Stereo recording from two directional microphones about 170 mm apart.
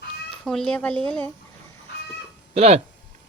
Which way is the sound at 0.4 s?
5° left (ahead or behind).